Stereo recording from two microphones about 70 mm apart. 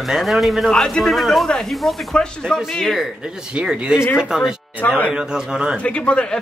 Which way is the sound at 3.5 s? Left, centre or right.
Centre.